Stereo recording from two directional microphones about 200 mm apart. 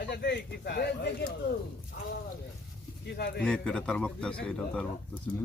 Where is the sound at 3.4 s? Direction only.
5° left (ahead or behind).